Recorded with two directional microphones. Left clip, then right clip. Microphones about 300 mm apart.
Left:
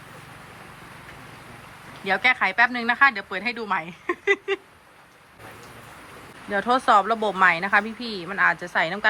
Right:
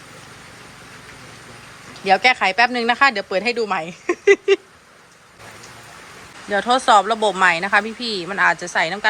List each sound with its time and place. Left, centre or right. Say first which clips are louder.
2.0 s speech: right 6 dB; centre
6.5 s speech: right 4 dB; centre